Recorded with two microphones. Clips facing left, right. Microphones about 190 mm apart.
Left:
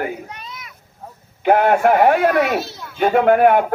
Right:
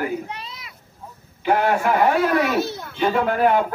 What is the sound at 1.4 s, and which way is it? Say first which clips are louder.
A man's voice: left 5 dB; 55° left (ahead or behind).